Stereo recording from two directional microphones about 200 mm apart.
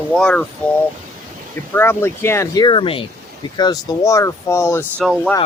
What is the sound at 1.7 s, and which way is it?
Speech, 10° left (ahead or behind).